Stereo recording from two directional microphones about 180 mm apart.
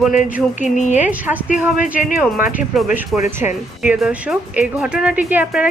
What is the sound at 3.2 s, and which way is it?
Speech, 10° right (ahead or behind).